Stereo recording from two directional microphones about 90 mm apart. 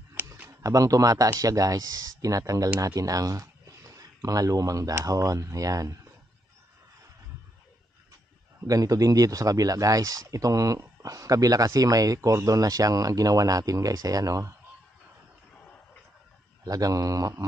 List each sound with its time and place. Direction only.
0.5 s speech: 40° right (ahead or behind)
8.6 s speech: 40° right (ahead or behind)
16.6 s speech: 40° right (ahead or behind)